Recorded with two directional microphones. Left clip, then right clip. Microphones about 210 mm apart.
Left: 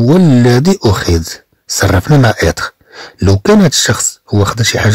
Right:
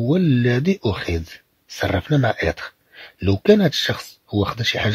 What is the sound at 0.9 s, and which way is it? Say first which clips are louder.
Speech: left 11 dB; 45° left (ahead or behind).